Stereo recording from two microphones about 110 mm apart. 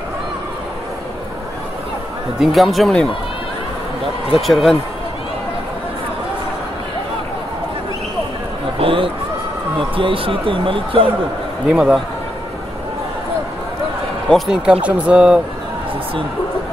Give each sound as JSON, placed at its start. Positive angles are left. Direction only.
{"t": 2.4, "sound": "speech", "side_deg": 0}
{"t": 4.3, "sound": "speech", "side_deg": 0}
{"t": 8.7, "sound": "speech", "side_deg": -55}
{"t": 11.7, "sound": "speech", "side_deg": -5}
{"t": 14.3, "sound": "speech", "side_deg": -10}